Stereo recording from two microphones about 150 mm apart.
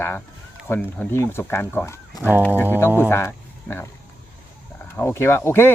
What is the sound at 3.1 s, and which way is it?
Speech, 15° left (ahead or behind).